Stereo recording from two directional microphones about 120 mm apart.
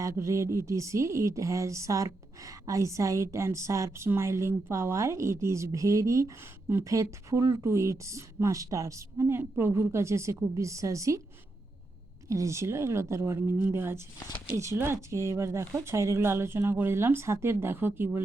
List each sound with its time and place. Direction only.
0.0 s speech: 25° right (ahead or behind)
12.3 s speech: 25° right (ahead or behind)